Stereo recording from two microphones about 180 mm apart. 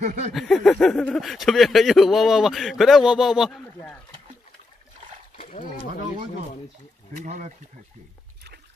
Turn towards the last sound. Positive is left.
turn(degrees=-40)  # may be behind; listen again after turning